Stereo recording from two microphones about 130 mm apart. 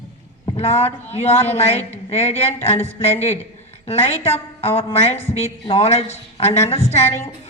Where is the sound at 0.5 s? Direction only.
55° left (ahead or behind).